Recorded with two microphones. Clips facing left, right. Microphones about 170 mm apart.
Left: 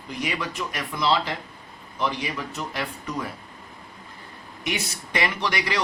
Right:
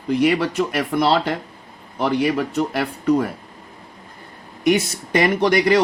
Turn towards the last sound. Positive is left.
turn(degrees=-50)  # may be behind; listen again after turning